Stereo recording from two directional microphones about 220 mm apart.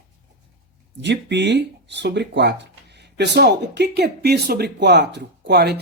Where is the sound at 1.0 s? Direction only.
50° right (ahead or behind).